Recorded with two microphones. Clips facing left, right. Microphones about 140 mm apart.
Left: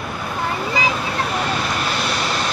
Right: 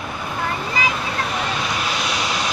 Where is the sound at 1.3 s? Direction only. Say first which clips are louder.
Left 2 dB; centre (ahead or behind).